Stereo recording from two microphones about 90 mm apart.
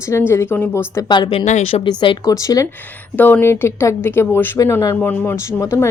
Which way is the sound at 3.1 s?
20° left (ahead or behind).